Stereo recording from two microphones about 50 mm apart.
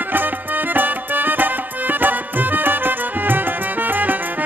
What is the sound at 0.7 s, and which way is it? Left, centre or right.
Music, right.